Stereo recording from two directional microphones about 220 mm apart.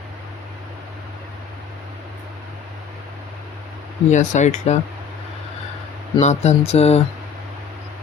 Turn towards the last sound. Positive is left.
turn(degrees=30)  # may be behind; listen again after turning